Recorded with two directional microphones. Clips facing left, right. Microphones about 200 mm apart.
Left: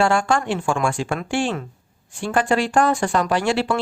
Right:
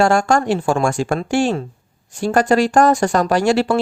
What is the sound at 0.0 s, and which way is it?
Speech, 45° right (ahead or behind).